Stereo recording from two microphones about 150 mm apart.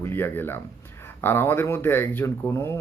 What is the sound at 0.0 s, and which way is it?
Speech, 15° left (ahead or behind).